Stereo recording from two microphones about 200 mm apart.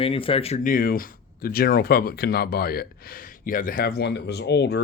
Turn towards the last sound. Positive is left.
turn(degrees=55)  # may be behind; listen again after turning